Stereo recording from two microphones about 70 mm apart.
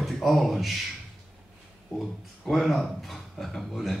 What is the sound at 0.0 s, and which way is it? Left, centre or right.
Speech, centre.